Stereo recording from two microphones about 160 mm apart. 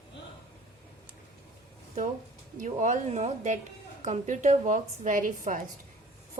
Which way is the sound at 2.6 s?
50° right (ahead or behind).